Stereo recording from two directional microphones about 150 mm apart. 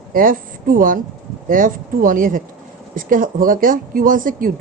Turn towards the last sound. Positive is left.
turn(degrees=-65)  # may be behind; listen again after turning